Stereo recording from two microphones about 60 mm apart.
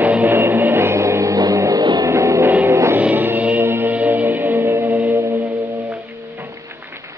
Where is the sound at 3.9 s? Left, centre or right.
Right.